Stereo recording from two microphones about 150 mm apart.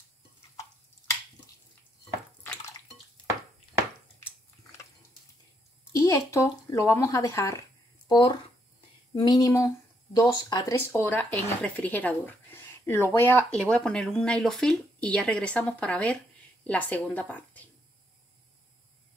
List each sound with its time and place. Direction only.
6.0 s speech: 20° left (ahead or behind)